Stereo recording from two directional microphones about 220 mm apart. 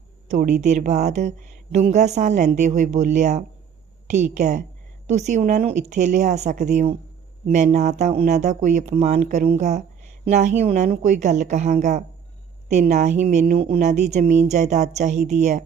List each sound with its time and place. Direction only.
0.3 s a woman's voice: 35° right (ahead or behind)